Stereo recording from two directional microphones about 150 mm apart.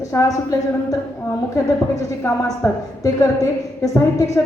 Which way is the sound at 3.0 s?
20° left (ahead or behind).